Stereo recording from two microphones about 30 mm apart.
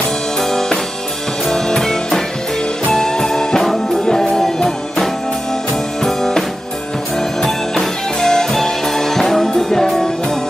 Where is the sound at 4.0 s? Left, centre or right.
Left.